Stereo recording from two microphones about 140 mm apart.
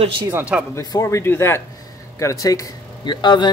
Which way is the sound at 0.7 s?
20° left (ahead or behind).